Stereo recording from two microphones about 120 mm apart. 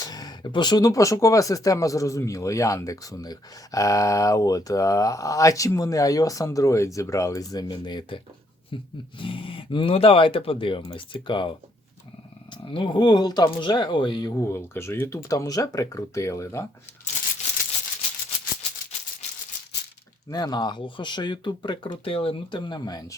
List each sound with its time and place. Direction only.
0.0 s speech: 35° left (ahead or behind)
12.6 s speech: 45° left (ahead or behind); by 16.6 s 25° left (ahead or behind)
20.3 s speech: 35° left (ahead or behind)